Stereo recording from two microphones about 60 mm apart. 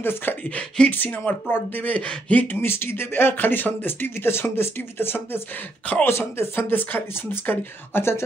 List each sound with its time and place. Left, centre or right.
0.0 s speech: left
0.6 s speech: centre
0.9 s speech: left